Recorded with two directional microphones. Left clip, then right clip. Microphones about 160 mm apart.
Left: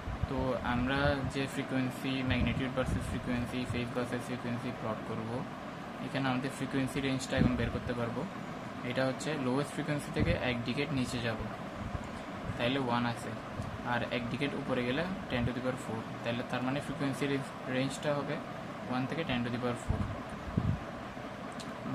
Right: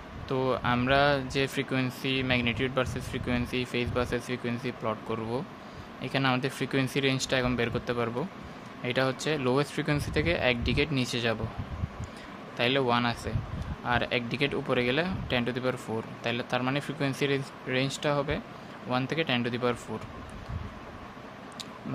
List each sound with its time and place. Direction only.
0.5 s speech: 90° right
6.1 s speech: 90° right
12.5 s speech: 90° right